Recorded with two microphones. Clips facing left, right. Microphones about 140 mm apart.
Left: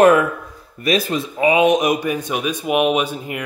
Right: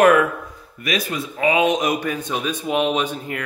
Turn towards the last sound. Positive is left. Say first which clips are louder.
# left 2 dB
turn(degrees=10)  # may be behind; listen again after turning